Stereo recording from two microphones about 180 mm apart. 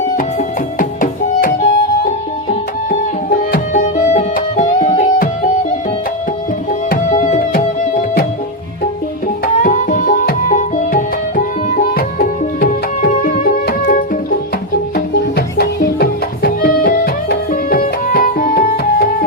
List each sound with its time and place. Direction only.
0.2 s music: 50° left (ahead or behind)
6.9 s music: 45° left (ahead or behind)
9.6 s music: 45° left (ahead or behind)